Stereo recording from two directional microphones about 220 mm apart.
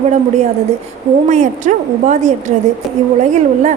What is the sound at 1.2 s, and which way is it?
A woman's voice, 35° right (ahead or behind).